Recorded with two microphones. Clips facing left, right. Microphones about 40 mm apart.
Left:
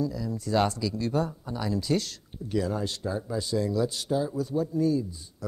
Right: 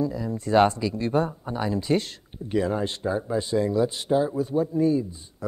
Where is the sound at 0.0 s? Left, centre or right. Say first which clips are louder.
Right 3 dB; right.